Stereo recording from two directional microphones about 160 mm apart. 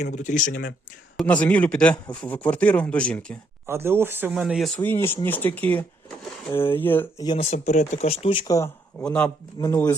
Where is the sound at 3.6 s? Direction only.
15° right (ahead or behind).